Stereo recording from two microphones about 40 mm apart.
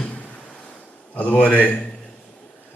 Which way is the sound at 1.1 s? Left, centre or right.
Left.